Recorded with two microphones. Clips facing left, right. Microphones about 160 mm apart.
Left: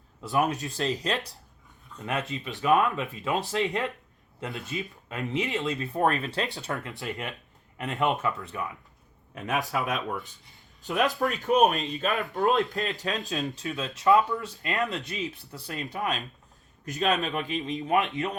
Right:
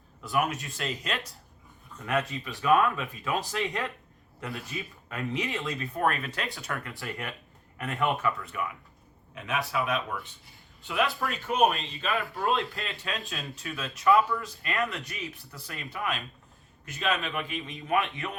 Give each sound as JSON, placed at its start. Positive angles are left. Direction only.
{"t": 0.2, "sound": "speech", "side_deg": 30}
{"t": 2.0, "sound": "speech", "side_deg": 20}
{"t": 9.3, "sound": "speech", "side_deg": 45}
{"t": 17.7, "sound": "speech", "side_deg": 20}